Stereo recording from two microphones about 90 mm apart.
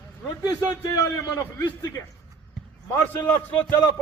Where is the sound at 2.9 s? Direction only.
20° left (ahead or behind).